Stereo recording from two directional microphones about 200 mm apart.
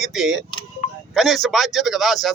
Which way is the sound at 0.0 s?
Centre (ahead or behind).